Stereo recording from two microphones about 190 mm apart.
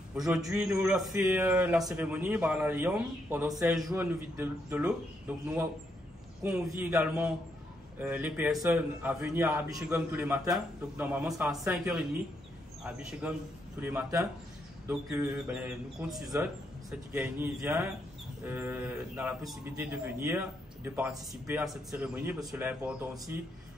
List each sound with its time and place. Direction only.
0.2 s a man's voice: 5° right (ahead or behind)